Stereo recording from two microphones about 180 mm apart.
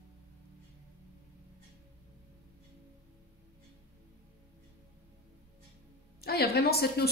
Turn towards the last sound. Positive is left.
turn(degrees=60)  # may be behind; listen again after turning